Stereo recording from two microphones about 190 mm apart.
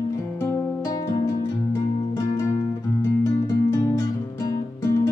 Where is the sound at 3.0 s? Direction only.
15° left (ahead or behind).